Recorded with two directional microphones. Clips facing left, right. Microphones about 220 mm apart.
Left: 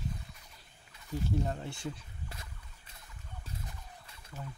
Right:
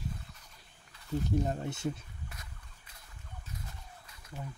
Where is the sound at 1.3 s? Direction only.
20° right (ahead or behind).